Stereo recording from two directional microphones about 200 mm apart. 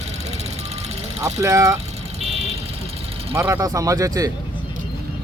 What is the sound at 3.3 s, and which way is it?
Speech, 15° right (ahead or behind).